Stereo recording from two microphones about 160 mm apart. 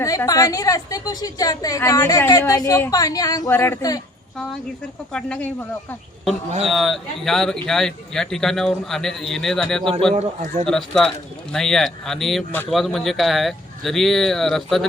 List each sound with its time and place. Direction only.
0.0 s a woman's voice: 20° left (ahead or behind)
5.1 s speech: 10° left (ahead or behind)
10.2 s a man's voice: 45° right (ahead or behind)
10.7 s speech: 5° left (ahead or behind)